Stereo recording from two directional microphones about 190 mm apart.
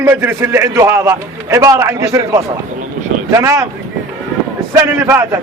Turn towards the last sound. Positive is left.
turn(degrees=-15)  # may be behind; listen again after turning